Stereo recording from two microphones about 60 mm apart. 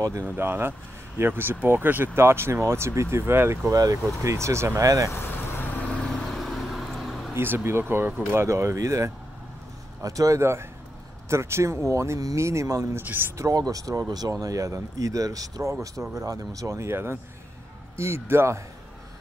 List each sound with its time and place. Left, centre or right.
0.2 s speech: right
2.1 s speech: right
3.7 s speech: right
4.2 s speech: right
4.8 s speech: right
5.1 s vehicle: left
5.8 s vehicle: centre
6.3 s vehicle: centre
7.3 s speech: right
10.4 s speech: right
13.0 s speech: right
13.4 s speech: right
15.8 s speech: right